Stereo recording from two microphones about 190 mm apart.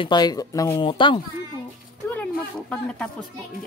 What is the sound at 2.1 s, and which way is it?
Speech, 10° left (ahead or behind).